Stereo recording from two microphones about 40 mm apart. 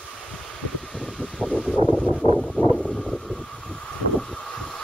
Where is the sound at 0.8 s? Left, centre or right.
Centre.